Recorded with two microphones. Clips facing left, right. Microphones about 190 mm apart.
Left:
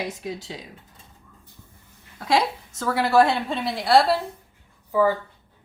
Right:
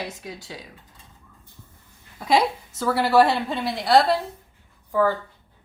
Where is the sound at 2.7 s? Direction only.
5° right (ahead or behind).